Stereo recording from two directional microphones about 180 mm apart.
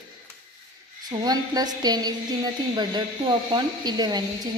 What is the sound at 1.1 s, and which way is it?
A woman's voice, 20° right (ahead or behind).